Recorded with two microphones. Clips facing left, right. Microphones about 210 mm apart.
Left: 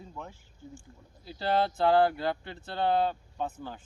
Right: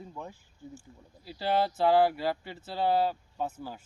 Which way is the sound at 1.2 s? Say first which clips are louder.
Even; 5° right (ahead or behind).